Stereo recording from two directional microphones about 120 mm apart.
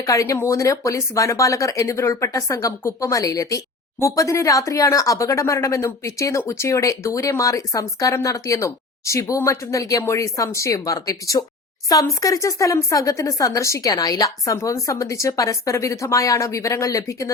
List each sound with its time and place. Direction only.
0.0 s speech: 25° left (ahead or behind)